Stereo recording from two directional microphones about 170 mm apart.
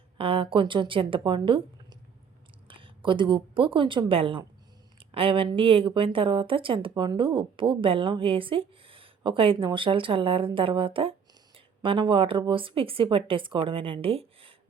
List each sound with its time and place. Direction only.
0.2 s speech: 30° right (ahead or behind)